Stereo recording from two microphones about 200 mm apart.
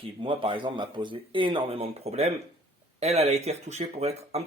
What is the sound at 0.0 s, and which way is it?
Speech, 25° right (ahead or behind).